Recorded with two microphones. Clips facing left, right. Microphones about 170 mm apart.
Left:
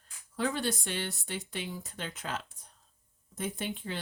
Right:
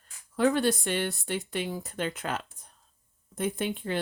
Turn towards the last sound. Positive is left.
turn(degrees=-60)  # may be behind; listen again after turning